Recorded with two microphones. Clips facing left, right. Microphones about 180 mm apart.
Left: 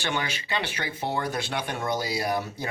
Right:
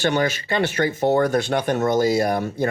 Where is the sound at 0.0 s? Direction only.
45° right (ahead or behind).